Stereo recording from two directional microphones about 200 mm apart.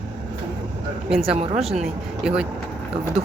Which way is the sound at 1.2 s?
30° right (ahead or behind).